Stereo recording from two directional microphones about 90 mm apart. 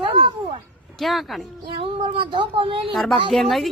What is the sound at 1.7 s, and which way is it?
Speech, 90° right.